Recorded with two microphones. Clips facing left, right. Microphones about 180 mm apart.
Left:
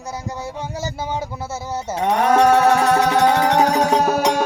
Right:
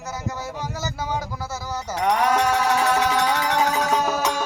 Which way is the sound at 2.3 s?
60° left (ahead or behind).